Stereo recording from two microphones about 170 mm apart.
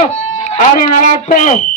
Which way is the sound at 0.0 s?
40° left (ahead or behind).